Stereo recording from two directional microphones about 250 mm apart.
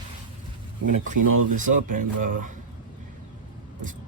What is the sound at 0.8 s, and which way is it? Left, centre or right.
Speech, right.